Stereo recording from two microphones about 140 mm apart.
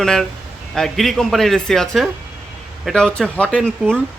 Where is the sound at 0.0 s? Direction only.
5° left (ahead or behind).